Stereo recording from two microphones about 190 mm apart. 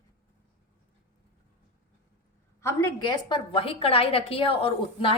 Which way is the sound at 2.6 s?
15° left (ahead or behind).